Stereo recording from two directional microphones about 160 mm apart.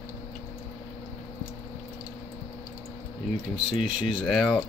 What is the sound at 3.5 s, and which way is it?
Speech, 30° left (ahead or behind).